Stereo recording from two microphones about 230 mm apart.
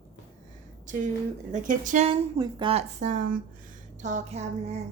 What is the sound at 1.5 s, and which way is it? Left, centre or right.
A woman's voice, right.